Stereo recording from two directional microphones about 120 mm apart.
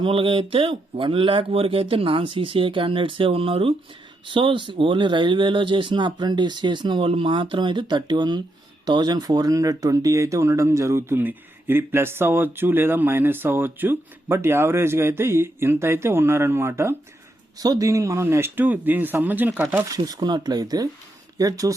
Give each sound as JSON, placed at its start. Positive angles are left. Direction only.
{"t": 0.0, "sound": "speech", "side_deg": -45}
{"t": 19.9, "sound": "speech", "side_deg": -35}